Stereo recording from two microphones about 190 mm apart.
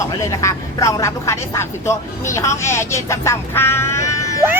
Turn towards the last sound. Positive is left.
turn(degrees=15)  # may be behind; listen again after turning